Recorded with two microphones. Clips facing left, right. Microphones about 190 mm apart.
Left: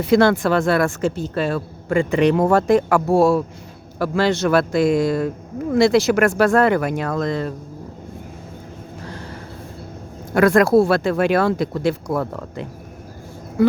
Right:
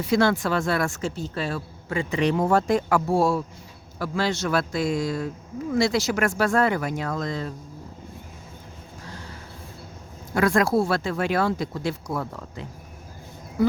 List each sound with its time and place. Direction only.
0.0 s speech: 65° left (ahead or behind)
10.3 s speech: 60° left (ahead or behind)